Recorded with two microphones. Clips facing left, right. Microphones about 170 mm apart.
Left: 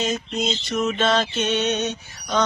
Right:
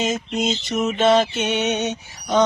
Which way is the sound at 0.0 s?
20° right (ahead or behind).